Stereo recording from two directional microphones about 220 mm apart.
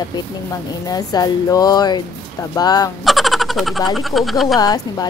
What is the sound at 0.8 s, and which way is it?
A woman's voice, 15° left (ahead or behind).